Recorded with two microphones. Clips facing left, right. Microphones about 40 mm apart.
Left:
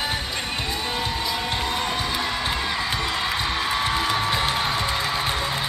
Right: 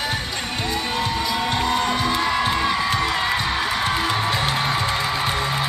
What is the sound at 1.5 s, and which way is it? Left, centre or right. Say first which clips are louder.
Music: right 4 dB; centre.